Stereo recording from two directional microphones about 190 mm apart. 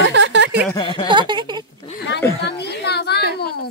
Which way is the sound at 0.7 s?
25° left (ahead or behind).